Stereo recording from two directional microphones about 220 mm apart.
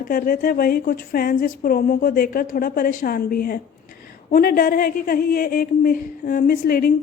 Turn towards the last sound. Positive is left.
turn(degrees=40)  # may be behind; listen again after turning